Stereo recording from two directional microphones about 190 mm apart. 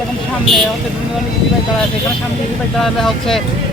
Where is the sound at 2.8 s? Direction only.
Centre (ahead or behind).